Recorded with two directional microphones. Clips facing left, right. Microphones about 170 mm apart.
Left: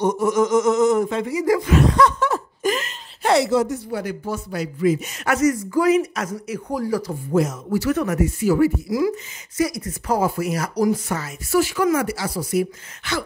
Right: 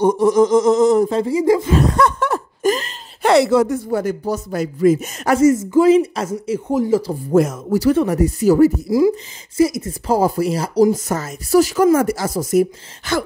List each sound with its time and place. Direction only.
0.0 s speech: 35° right (ahead or behind)
1.9 s a sound: 50° right (ahead or behind)
3.2 s speech: 65° right (ahead or behind); by 5.3 s 45° right (ahead or behind)
5.3 s speech: 25° right (ahead or behind)
7.3 s speech: 50° right (ahead or behind)
7.8 s speech: 30° right (ahead or behind)
9.0 s speech: 25° right (ahead or behind)
11.1 s speech: 40° right (ahead or behind)